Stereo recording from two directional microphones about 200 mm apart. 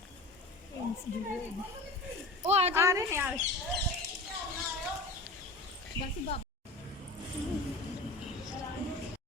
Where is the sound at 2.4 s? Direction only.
30° right (ahead or behind).